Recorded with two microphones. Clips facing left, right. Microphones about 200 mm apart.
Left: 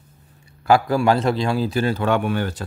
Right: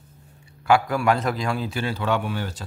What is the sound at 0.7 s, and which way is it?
A man's voice, 35° left (ahead or behind).